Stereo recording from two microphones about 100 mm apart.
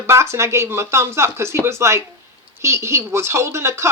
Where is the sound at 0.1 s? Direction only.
30° right (ahead or behind).